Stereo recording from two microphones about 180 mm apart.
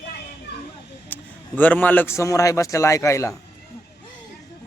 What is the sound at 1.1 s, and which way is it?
A man's voice, 10° left (ahead or behind).